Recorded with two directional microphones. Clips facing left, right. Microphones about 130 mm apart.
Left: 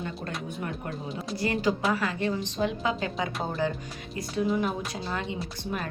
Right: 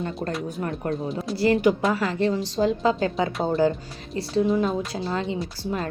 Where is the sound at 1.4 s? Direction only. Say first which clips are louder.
Right 7 dB; 30° right (ahead or behind).